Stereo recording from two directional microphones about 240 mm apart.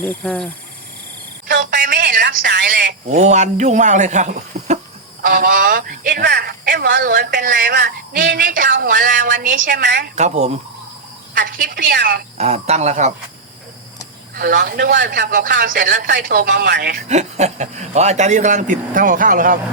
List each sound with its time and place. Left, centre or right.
0.0 s speech: centre
1.5 s telephone: right
3.1 s speech: right
10.2 s speech: right
12.4 s speech: right
14.3 s a man's voice: right
17.1 s speech: right